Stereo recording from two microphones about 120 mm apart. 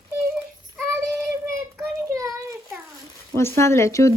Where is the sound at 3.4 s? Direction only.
20° left (ahead or behind).